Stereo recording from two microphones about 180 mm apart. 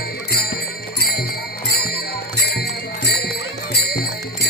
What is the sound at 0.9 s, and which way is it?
Jingle bell, 60° left (ahead or behind).